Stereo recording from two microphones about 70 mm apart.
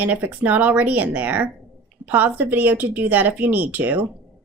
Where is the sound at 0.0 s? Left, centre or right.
Right.